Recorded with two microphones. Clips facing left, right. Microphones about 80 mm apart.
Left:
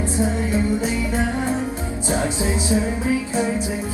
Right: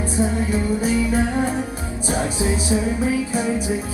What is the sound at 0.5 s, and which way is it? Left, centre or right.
Music, left.